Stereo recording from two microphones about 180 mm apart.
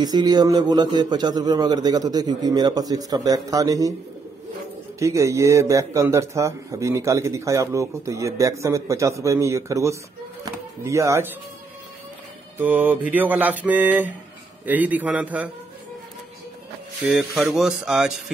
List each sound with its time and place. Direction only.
0.0 s a man's voice: 20° right (ahead or behind)
4.9 s speech: 15° right (ahead or behind)
12.5 s speech: 10° right (ahead or behind)
17.1 s speech: centre (ahead or behind)